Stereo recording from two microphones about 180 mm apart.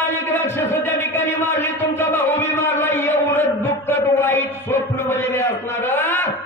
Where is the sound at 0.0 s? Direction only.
10° left (ahead or behind).